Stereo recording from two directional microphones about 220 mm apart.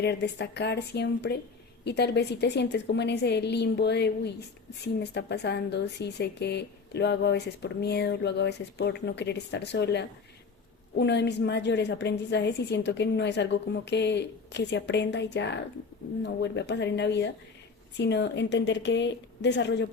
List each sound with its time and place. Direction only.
0.0 s speech: 50° left (ahead or behind)